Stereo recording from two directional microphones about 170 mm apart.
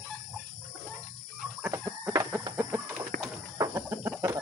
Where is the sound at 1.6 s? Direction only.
15° right (ahead or behind).